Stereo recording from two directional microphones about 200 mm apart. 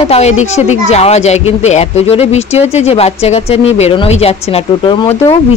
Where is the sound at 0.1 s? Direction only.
35° left (ahead or behind).